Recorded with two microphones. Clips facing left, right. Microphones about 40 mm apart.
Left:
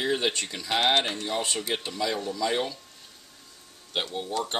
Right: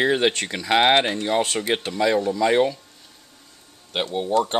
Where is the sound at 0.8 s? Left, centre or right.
Right.